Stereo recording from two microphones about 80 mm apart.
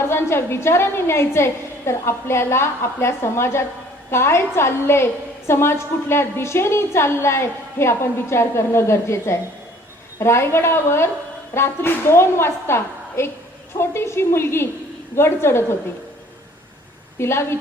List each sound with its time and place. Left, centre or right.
0.0 s a woman's voice: left
17.2 s a woman's voice: left